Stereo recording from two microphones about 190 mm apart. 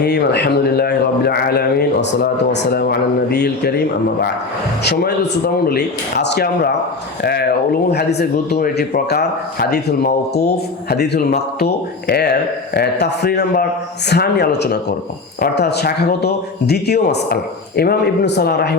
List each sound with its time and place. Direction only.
0.0 s speech: 60° left (ahead or behind)
5.6 s speech: 60° left (ahead or behind)